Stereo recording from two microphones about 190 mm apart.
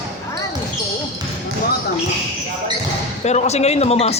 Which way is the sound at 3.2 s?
35° left (ahead or behind).